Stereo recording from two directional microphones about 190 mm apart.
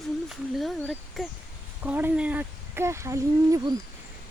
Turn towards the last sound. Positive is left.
turn(degrees=-15)  # may be behind; listen again after turning